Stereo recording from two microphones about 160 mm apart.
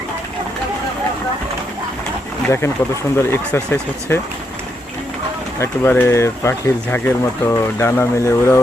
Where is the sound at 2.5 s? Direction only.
15° left (ahead or behind).